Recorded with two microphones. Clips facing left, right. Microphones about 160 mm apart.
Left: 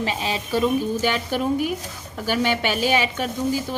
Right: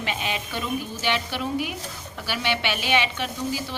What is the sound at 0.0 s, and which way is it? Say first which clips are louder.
A woman's voice: left 4 dB; 35° left (ahead or behind).